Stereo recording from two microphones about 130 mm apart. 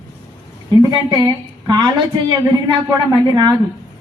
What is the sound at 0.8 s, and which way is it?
A woman's voice, 30° right (ahead or behind).